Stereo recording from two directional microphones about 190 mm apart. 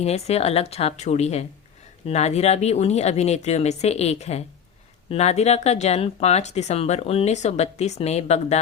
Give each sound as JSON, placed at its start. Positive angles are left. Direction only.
{"t": 0.0, "sound": "speech", "side_deg": 35}